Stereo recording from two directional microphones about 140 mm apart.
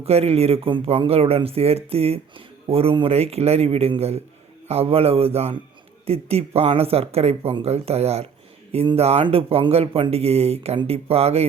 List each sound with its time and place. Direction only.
0.0 s speech: 45° right (ahead or behind)